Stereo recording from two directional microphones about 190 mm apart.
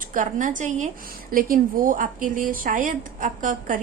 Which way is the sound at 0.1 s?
45° right (ahead or behind).